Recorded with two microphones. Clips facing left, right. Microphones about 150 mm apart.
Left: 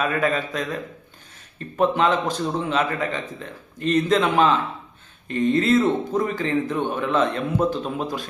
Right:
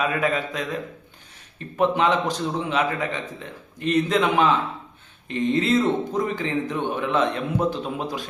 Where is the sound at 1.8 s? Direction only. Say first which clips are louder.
Left 1 dB; 15° right (ahead or behind).